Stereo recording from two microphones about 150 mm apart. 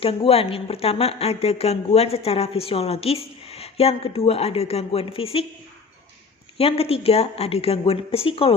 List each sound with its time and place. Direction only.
0.0 s a woman's voice: 40° left (ahead or behind)
6.6 s a woman's voice: 40° left (ahead or behind)